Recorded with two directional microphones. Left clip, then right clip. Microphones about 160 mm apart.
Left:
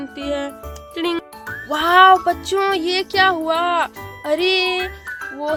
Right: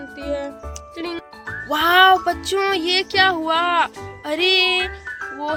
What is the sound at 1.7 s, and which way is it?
Music, 45° left (ahead or behind).